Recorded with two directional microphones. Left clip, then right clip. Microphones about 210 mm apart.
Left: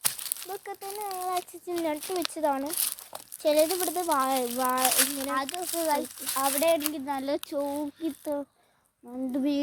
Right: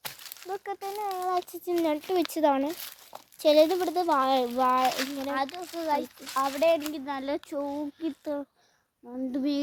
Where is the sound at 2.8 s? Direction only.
55° left (ahead or behind).